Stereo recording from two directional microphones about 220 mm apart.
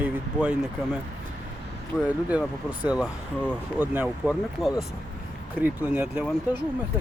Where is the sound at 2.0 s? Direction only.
5° right (ahead or behind).